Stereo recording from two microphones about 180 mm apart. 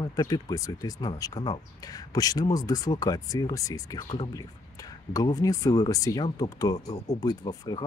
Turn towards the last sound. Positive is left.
turn(degrees=20)  # may be behind; listen again after turning